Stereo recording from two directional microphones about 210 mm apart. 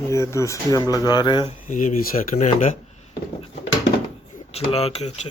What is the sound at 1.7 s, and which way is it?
Speech, 40° left (ahead or behind).